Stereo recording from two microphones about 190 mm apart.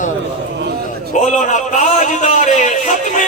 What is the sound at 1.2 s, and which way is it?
A man's voice, 40° left (ahead or behind).